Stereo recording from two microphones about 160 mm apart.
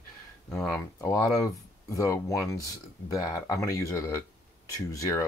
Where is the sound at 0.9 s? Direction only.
20° left (ahead or behind).